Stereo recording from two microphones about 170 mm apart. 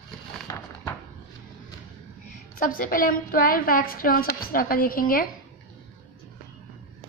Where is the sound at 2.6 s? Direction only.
55° left (ahead or behind).